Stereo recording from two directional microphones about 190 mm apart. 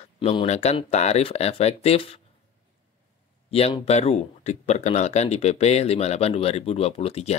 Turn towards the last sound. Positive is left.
turn(degrees=35)  # may be behind; listen again after turning